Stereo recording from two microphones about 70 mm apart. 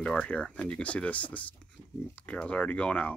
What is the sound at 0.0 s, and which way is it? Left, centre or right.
Speech, centre.